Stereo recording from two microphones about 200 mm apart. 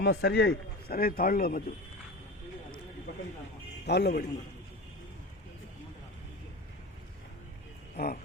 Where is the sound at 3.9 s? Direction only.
55° left (ahead or behind).